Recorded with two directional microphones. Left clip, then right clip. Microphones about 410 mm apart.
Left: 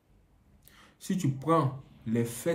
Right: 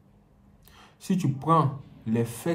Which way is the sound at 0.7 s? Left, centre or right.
Centre.